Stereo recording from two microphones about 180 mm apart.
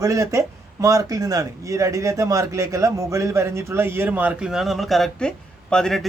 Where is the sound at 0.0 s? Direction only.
20° right (ahead or behind).